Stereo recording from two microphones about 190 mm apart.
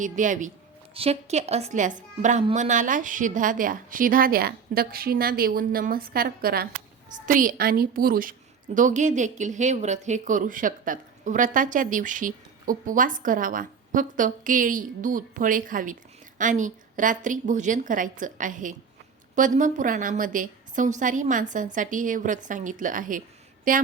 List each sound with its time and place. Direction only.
0.0 s a woman's voice: 40° right (ahead or behind)